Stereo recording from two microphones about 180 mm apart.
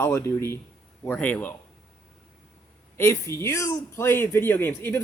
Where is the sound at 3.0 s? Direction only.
15° left (ahead or behind).